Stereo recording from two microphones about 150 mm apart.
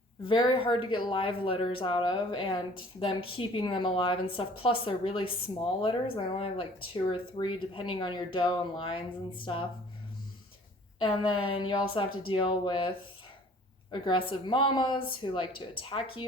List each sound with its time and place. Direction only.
0.3 s a woman's voice: 35° left (ahead or behind)
11.0 s a woman's voice: 35° left (ahead or behind)
13.9 s a woman's voice: 35° left (ahead or behind)